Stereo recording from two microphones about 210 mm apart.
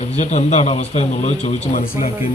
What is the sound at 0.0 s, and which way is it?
Speech, 35° left (ahead or behind).